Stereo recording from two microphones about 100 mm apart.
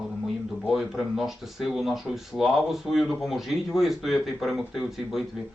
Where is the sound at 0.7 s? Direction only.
5° right (ahead or behind).